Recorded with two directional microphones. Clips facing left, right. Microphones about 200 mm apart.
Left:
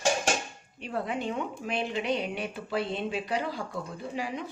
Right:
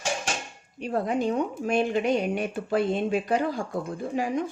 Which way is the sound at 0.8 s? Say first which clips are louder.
Right 6 dB; 40° right (ahead or behind).